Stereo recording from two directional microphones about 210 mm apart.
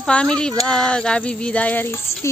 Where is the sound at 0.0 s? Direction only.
5° left (ahead or behind).